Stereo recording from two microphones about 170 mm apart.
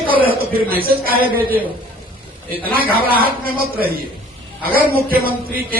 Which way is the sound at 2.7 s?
60° right (ahead or behind).